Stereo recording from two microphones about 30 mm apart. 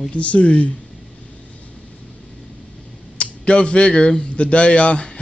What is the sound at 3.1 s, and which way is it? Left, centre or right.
Speech, left.